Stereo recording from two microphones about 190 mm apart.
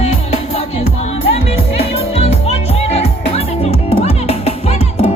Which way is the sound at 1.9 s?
35° left (ahead or behind).